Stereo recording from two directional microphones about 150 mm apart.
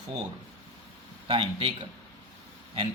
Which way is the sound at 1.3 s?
35° right (ahead or behind).